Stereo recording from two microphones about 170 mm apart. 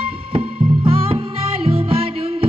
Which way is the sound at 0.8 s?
35° right (ahead or behind).